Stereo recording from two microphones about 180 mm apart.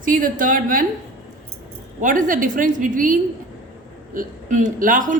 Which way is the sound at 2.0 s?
45° right (ahead or behind).